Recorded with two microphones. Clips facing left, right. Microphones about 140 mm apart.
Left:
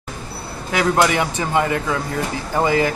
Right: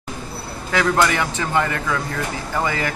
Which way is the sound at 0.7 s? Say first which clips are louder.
Left 1 dB; 15° left (ahead or behind).